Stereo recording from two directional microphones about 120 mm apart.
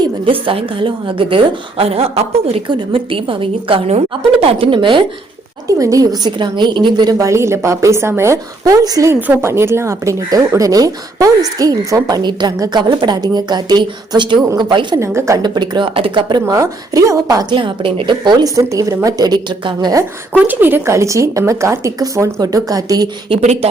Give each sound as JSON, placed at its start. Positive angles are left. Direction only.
{"t": 0.0, "sound": "a woman's voice", "side_deg": -45}
{"t": 5.6, "sound": "a woman's voice", "side_deg": -30}
{"t": 14.9, "sound": "a woman's voice", "side_deg": -25}
{"t": 15.4, "sound": "speech", "side_deg": -35}
{"t": 16.6, "sound": "a woman's voice", "side_deg": -25}
{"t": 17.5, "sound": "speech", "side_deg": -45}
{"t": 20.3, "sound": "a woman's voice", "side_deg": -15}
{"t": 23.4, "sound": "speech", "side_deg": -65}